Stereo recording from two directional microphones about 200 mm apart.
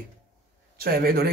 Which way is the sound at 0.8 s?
50° right (ahead or behind).